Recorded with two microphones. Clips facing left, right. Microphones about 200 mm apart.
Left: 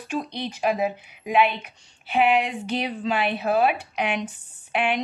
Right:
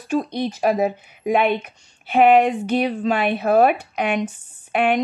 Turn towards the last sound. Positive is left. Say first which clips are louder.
# right 6 dB
turn(degrees=-50)  # may be behind; listen again after turning